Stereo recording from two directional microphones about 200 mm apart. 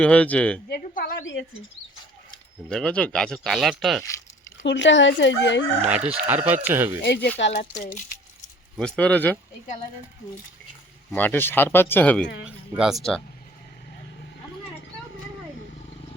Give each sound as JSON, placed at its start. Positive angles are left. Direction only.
{"t": 0.0, "sound": "speech", "side_deg": 5}
{"t": 0.7, "sound": "a woman's voice", "side_deg": 50}
{"t": 1.2, "sound": "speech", "side_deg": 65}
{"t": 2.6, "sound": "speech", "side_deg": 5}
{"t": 4.6, "sound": "speech", "side_deg": 65}
{"t": 6.1, "sound": "speech", "side_deg": -10}
{"t": 7.0, "sound": "speech", "side_deg": 55}
{"t": 7.6, "sound": "speech", "side_deg": 40}
{"t": 8.8, "sound": "speech", "side_deg": 5}
{"t": 11.1, "sound": "speech", "side_deg": 10}